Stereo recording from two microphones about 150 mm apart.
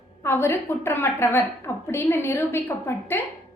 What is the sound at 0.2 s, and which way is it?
A woman's voice, 15° left (ahead or behind).